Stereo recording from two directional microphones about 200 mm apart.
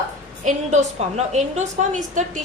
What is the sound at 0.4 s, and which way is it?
A woman's voice, 35° right (ahead or behind).